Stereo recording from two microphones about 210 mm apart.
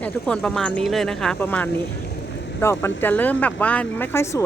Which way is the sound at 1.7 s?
55° left (ahead or behind).